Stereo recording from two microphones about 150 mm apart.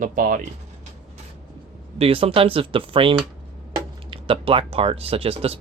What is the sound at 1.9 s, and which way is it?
Speech, 40° right (ahead or behind).